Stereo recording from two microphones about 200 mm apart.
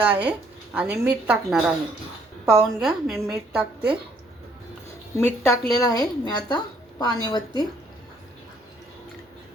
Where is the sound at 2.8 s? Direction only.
Centre (ahead or behind).